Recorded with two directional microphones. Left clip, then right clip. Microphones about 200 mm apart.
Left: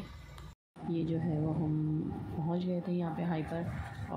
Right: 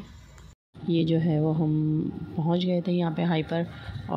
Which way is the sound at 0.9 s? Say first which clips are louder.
Right 10 dB; 35° right (ahead or behind).